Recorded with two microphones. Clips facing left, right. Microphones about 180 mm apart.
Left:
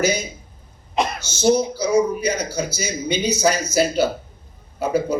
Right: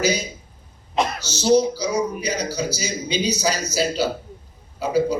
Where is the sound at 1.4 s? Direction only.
50° left (ahead or behind).